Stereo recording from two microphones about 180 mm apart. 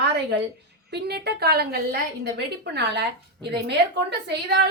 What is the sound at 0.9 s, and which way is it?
A woman's voice, 65° right (ahead or behind).